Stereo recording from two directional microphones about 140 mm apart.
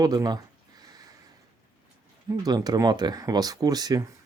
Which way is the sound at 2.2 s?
25° right (ahead or behind).